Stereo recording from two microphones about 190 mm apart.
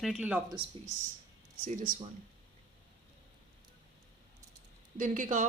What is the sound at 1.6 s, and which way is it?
Speech, 45° right (ahead or behind).